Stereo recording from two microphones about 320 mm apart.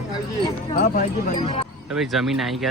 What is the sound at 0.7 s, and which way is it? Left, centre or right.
Speech, left.